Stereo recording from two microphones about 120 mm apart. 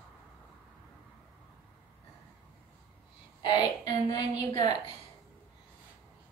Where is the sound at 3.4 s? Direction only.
35° left (ahead or behind).